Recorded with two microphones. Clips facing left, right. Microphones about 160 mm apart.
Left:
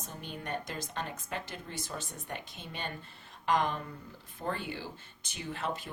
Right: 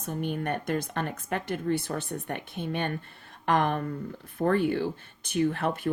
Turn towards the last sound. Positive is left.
turn(degrees=-60)  # may be behind; listen again after turning